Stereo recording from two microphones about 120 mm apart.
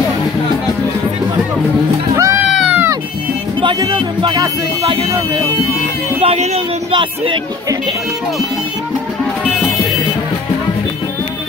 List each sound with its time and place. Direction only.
2.1 s music: 25° right (ahead or behind)
2.4 s cat: 5° right (ahead or behind)
4.2 s speech: 40° right (ahead or behind)
6.2 s speech: 60° right (ahead or behind)
6.9 s speech: 45° right (ahead or behind)